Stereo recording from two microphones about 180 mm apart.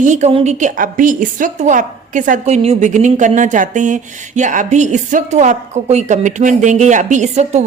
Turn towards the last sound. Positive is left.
turn(degrees=-40)  # may be behind; listen again after turning